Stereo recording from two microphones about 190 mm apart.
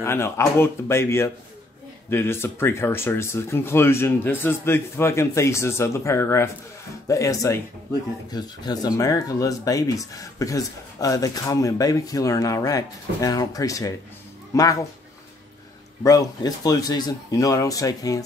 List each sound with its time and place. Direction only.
0.0 s speech: 15° left (ahead or behind)
16.0 s speech: 20° left (ahead or behind)